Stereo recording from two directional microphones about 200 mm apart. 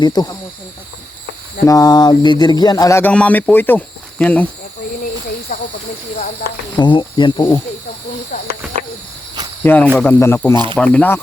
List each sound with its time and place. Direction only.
0.0 s speech: 20° left (ahead or behind)
1.6 s a sound: 20° left (ahead or behind)
5.5 s speech: 45° left (ahead or behind)
6.7 s speech: 25° left (ahead or behind)
8.3 s speech: 40° left (ahead or behind)
9.6 s a sound: 10° left (ahead or behind)
10.8 s speech: 5° left (ahead or behind)